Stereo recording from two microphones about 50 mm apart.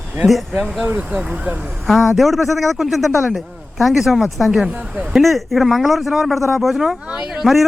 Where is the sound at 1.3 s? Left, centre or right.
Right.